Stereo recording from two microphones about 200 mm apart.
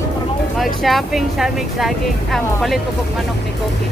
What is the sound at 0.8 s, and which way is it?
Speech, centre (ahead or behind).